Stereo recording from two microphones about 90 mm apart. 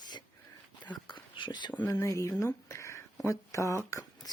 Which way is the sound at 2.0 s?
35° left (ahead or behind).